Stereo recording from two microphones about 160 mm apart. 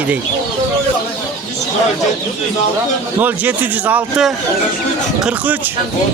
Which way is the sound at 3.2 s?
10° right (ahead or behind).